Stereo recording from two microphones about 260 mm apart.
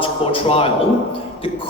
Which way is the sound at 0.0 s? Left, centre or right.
Left.